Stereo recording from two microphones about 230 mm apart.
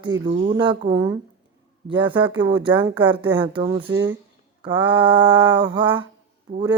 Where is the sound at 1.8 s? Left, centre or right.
Right.